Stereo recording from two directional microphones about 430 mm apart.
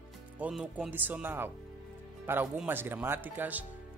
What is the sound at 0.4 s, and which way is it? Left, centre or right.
Music, centre.